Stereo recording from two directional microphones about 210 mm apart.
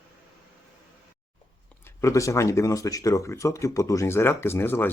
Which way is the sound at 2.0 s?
15° left (ahead or behind).